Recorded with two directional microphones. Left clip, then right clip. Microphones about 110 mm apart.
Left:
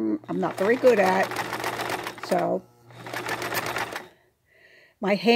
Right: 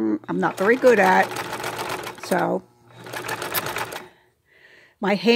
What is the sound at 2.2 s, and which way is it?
Speech, 40° right (ahead or behind).